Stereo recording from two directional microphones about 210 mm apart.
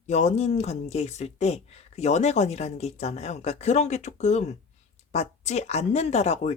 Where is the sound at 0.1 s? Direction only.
35° left (ahead or behind).